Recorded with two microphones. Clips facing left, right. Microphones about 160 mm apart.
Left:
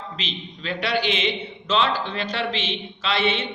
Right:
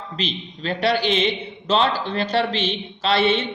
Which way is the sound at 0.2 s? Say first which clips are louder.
Right 6 dB; 40° right (ahead or behind).